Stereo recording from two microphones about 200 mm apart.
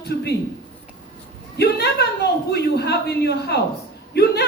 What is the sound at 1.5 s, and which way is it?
A woman's voice, 55° left (ahead or behind).